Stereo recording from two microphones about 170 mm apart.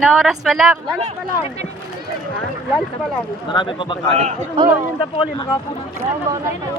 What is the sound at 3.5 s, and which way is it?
Speech, 30° left (ahead or behind).